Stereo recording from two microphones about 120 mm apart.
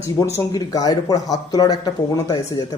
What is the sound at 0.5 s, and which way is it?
Speech, 30° left (ahead or behind).